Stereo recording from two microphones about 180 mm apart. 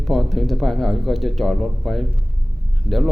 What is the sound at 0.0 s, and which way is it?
Speech, centre (ahead or behind).